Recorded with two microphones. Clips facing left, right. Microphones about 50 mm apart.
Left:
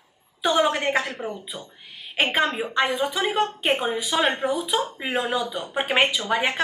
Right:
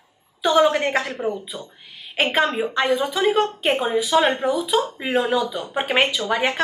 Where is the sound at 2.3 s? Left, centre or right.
Centre.